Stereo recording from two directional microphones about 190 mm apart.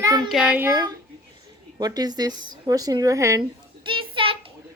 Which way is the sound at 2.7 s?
20° right (ahead or behind).